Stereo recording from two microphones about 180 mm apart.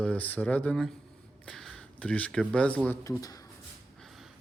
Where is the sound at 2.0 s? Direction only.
5° left (ahead or behind).